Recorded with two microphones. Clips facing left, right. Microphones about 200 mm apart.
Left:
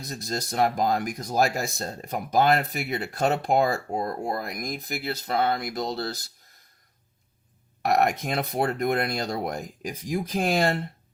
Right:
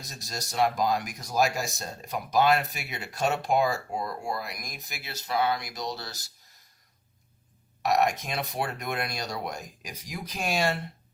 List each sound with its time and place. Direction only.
0.0 s speech: 55° left (ahead or behind)
7.9 s speech: 55° left (ahead or behind)